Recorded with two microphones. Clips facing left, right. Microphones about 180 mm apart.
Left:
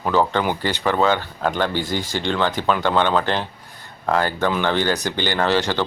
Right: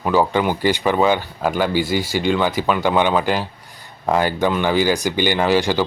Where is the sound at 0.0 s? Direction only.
10° right (ahead or behind).